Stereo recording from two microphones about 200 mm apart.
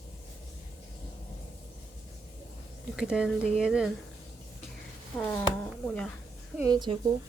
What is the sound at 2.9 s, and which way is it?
Speech, 5° right (ahead or behind).